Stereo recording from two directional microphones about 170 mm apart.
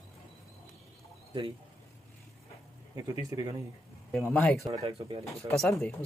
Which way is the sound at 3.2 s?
20° right (ahead or behind).